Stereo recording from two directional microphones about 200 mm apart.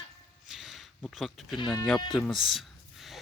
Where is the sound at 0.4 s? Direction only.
Centre (ahead or behind).